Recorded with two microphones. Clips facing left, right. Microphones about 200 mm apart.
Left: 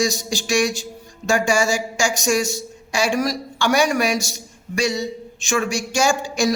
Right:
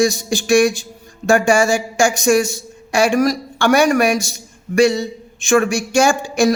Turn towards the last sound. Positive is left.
turn(degrees=-55)  # may be behind; listen again after turning